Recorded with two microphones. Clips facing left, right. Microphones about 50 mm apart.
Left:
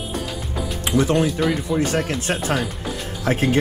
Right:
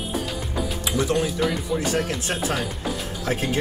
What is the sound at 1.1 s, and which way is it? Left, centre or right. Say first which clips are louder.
Speech: left 3 dB; centre.